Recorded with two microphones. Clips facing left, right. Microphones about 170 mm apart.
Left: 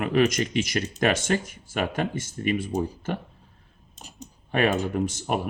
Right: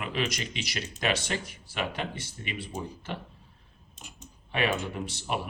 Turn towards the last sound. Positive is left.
turn(degrees=45)  # may be behind; listen again after turning